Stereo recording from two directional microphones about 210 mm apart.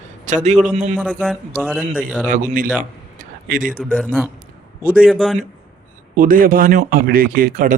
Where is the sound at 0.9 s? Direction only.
Centre (ahead or behind).